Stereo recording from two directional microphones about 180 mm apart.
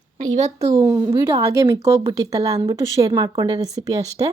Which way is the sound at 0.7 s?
15° right (ahead or behind).